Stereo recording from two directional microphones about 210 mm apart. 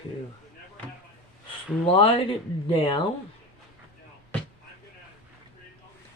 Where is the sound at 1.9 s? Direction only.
25° left (ahead or behind).